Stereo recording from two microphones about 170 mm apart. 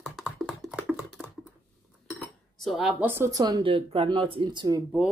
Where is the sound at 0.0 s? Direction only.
5° right (ahead or behind).